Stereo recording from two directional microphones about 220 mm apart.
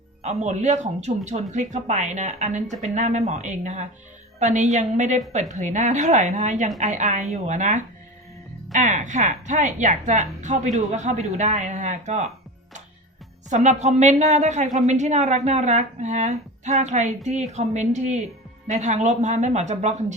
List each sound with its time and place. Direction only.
0.2 s speech: 30° right (ahead or behind)
13.5 s speech: 30° right (ahead or behind)